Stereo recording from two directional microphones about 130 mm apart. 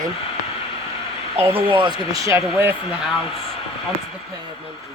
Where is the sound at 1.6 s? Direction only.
45° right (ahead or behind).